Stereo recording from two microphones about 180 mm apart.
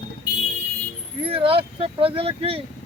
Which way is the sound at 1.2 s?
30° right (ahead or behind).